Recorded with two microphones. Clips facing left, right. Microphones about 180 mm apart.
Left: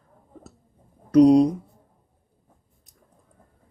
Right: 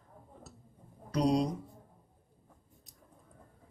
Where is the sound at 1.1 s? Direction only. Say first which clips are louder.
Left 14 dB; 55° left (ahead or behind).